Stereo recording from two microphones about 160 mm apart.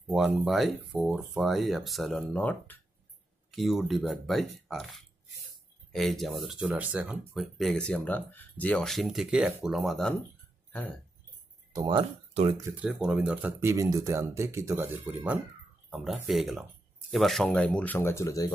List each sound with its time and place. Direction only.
0.1 s speech: centre (ahead or behind)
3.5 s speech: centre (ahead or behind)
11.8 s speech: 35° right (ahead or behind)
12.6 s speech: 10° right (ahead or behind); by 18.5 s 20° left (ahead or behind)